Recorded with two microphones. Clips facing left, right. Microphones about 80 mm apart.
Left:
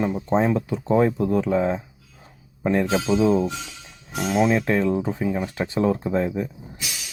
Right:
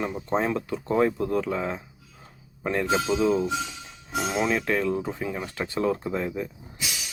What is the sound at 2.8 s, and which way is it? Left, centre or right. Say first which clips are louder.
Speech: left 1 dB; centre.